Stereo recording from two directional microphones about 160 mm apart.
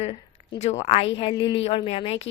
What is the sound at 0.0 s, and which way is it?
A woman's voice, 40° left (ahead or behind).